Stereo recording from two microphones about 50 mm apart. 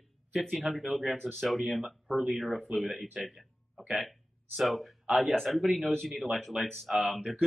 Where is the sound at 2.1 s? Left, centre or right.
Centre.